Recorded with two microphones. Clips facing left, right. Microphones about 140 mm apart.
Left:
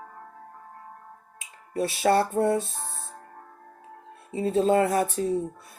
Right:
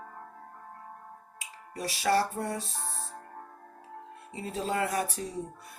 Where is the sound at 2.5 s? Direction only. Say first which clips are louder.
Left 10 dB; 45° left (ahead or behind).